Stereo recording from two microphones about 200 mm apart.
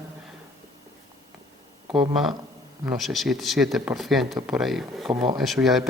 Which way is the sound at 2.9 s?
Centre (ahead or behind).